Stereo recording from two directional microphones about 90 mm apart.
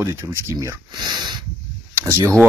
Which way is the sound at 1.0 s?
50° right (ahead or behind).